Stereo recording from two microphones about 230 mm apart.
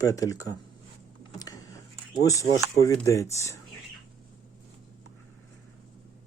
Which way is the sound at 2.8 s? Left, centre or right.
Centre.